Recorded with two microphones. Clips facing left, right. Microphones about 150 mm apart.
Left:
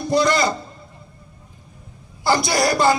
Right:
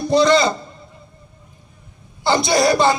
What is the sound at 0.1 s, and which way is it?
Speech, 25° right (ahead or behind).